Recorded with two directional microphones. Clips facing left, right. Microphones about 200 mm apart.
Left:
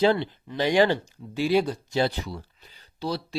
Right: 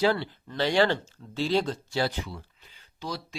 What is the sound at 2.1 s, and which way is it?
Speech, 35° left (ahead or behind).